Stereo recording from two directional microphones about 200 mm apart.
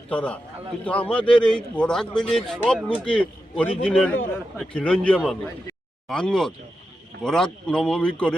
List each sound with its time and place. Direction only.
0.1 s a man's voice: 5° left (ahead or behind)